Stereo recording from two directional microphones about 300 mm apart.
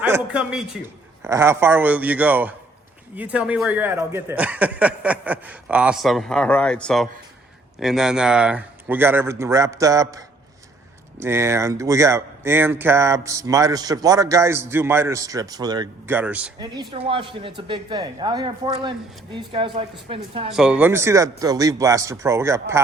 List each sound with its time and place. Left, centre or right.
0.0 s speech: centre
20.5 s speech: centre